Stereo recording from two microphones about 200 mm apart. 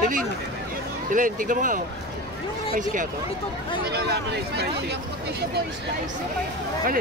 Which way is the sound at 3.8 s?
55° right (ahead or behind).